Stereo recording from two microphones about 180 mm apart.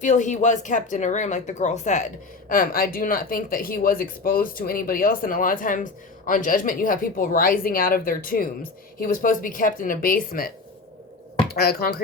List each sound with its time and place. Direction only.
0.0 s a woman's voice: 45° left (ahead or behind)
2.5 s speech: 50° left (ahead or behind)